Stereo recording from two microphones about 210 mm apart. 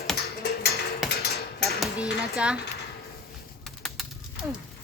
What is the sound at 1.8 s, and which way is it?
Speech, 5° right (ahead or behind).